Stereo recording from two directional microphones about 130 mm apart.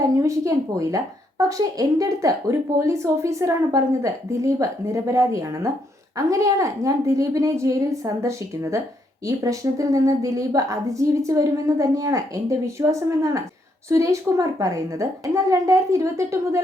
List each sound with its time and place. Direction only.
0.0 s a woman's voice: 25° right (ahead or behind)